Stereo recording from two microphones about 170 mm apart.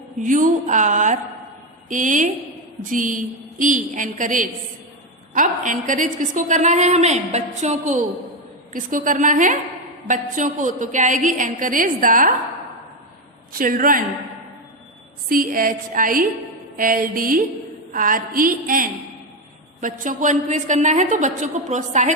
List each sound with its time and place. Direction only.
0.2 s a woman's voice: 50° right (ahead or behind)
13.5 s a woman's voice: 55° right (ahead or behind)
15.3 s a woman's voice: 55° right (ahead or behind)